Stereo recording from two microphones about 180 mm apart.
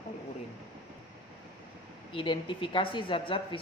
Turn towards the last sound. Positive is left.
turn(degrees=30)  # may be behind; listen again after turning